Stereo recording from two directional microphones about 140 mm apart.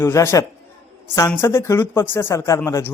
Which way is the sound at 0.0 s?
20° left (ahead or behind).